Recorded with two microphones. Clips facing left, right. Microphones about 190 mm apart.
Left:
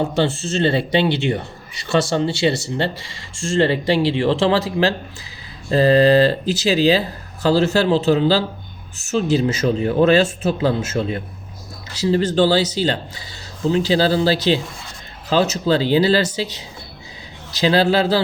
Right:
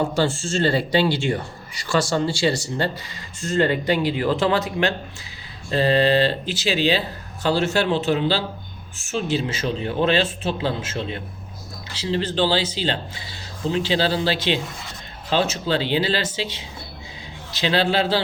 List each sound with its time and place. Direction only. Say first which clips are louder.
0.4 s speech: left 2 dB; 20° left (ahead or behind); by 18.2 s 40° left (ahead or behind)